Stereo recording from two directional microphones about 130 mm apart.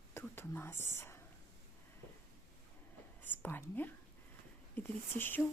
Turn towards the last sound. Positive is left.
turn(degrees=15)  # may be behind; listen again after turning